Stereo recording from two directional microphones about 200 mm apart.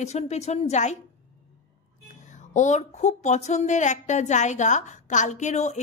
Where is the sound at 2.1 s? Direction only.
35° left (ahead or behind).